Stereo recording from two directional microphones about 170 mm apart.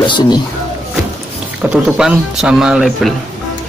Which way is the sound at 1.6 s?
5° right (ahead or behind).